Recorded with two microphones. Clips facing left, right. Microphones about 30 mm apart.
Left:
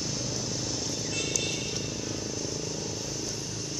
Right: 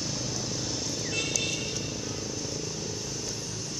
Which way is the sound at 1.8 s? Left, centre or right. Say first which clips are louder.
Even; centre.